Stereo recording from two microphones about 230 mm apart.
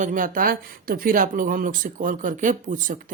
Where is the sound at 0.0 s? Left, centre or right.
Right.